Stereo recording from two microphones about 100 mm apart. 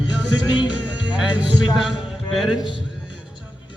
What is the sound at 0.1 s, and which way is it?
A man's voice, 15° right (ahead or behind).